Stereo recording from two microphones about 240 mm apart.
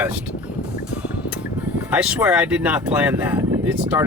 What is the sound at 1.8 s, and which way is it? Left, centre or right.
Speech, centre.